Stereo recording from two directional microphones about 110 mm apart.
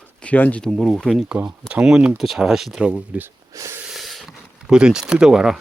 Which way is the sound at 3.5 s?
30° right (ahead or behind).